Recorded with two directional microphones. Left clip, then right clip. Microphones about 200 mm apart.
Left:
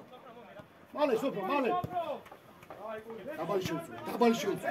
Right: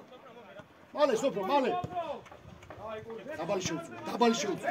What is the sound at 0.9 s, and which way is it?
Speech, 55° right (ahead or behind).